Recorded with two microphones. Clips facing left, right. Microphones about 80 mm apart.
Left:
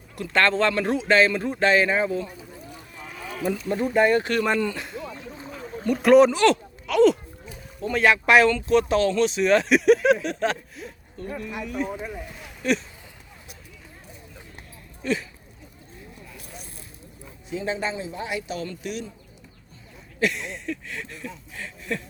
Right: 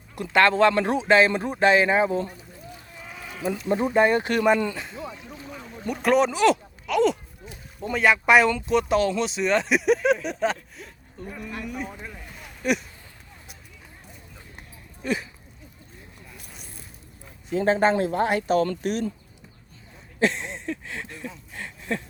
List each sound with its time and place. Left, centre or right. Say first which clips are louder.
0.2 s speech: right 3 dB; centre
3.1 s sheep: left 2 dB; centre
3.5 s speech: right 2 dB; right
5.5 s a sound: left 6 dB; centre
7.9 s speech: left 1 dB; centre
8.4 s speech: left 2 dB; centre
11.2 s speech: left 3 dB; centre
11.9 s speech: left 7 dB; centre
15.0 s speech: left 1 dB; centre
17.5 s speech: right 8 dB; right
20.1 s speech: right 2 dB; right